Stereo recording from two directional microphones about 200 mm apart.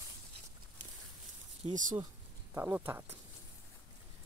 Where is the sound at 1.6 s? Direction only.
30° right (ahead or behind).